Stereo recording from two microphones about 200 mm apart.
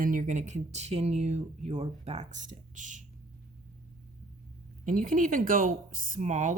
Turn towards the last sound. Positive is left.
turn(degrees=-40)  # may be behind; listen again after turning